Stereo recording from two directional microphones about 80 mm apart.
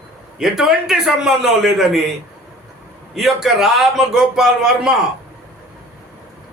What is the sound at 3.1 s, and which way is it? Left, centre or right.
A man's voice, centre.